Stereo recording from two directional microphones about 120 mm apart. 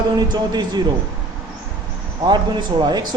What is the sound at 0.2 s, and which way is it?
Speech, 35° right (ahead or behind).